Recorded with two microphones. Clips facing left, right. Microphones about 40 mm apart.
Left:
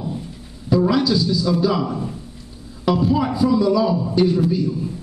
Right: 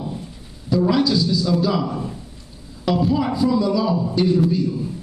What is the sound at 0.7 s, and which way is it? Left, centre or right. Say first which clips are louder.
A man's voice: left 1 dB; centre.